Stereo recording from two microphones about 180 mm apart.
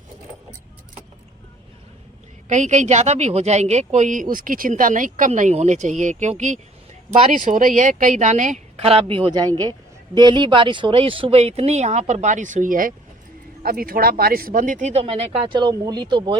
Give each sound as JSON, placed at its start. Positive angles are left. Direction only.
{"t": 2.5, "sound": "a woman's voice", "side_deg": -40}